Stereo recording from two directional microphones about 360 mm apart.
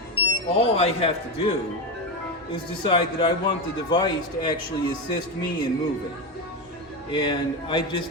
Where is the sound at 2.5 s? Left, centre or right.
Centre.